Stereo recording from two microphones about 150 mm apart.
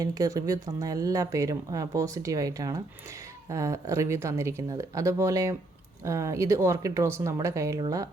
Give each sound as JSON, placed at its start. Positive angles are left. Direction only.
{"t": 0.0, "sound": "a woman's voice", "side_deg": -25}